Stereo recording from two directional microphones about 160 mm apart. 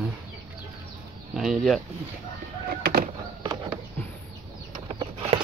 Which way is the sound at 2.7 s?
75° right (ahead or behind).